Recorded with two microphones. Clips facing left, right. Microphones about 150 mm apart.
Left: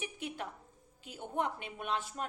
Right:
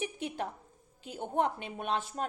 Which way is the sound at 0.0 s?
25° right (ahead or behind).